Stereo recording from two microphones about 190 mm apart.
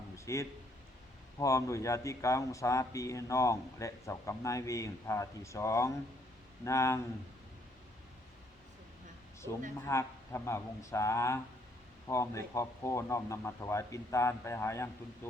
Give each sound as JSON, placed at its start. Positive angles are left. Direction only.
{"t": 0.3, "sound": "speech", "side_deg": 15}
{"t": 9.4, "sound": "speech", "side_deg": 15}